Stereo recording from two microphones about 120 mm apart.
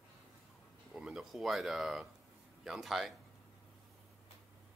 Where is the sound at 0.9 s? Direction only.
5° right (ahead or behind).